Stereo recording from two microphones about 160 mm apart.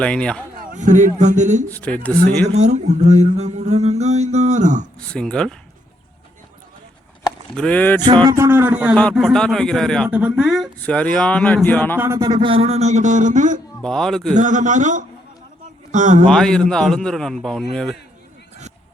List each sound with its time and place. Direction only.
0.0 s a man's voice: 5° left (ahead or behind)
0.6 s speech: 55° right (ahead or behind)
1.7 s speech: 10° left (ahead or behind)
2.5 s speech: 45° right (ahead or behind)
4.9 s a man's voice: 5° left (ahead or behind)
7.5 s speech: 5° left (ahead or behind)
8.0 s speech: 25° right (ahead or behind); by 9.0 s 10° right (ahead or behind)
9.0 s a man's voice: centre (ahead or behind)
10.1 s speech: 10° right (ahead or behind); by 11.9 s 10° left (ahead or behind)
11.9 s speech: 15° right (ahead or behind); by 13.6 s 50° right (ahead or behind)
13.8 s a man's voice: 5° left (ahead or behind)
14.3 s speech: 50° right (ahead or behind)
16.3 s a man's voice: 5° left (ahead or behind)